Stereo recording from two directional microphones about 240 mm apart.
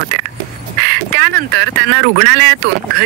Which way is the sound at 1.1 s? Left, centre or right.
Right.